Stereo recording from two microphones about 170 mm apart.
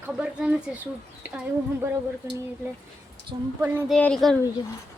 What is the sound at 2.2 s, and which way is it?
Speech, 20° right (ahead or behind).